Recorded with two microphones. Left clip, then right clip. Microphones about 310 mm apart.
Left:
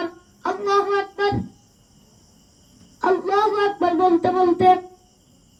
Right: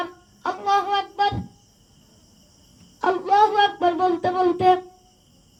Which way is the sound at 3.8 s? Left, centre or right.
Right.